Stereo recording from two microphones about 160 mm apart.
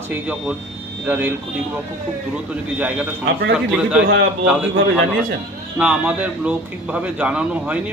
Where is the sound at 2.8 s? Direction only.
10° right (ahead or behind).